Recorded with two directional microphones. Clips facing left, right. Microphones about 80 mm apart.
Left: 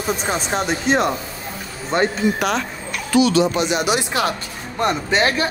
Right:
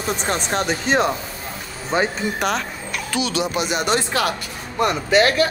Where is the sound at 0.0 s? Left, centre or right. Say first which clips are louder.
Left 1 dB; centre.